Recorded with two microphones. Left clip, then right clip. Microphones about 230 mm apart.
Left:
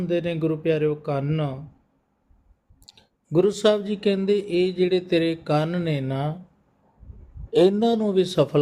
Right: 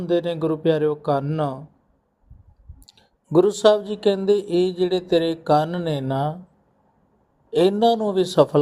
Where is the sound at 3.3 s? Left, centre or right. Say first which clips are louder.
Right 4 dB; centre.